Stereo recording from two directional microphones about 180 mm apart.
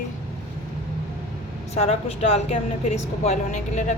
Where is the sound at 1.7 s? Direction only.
35° left (ahead or behind).